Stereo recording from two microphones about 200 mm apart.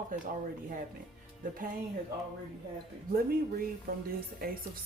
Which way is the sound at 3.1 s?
50° right (ahead or behind).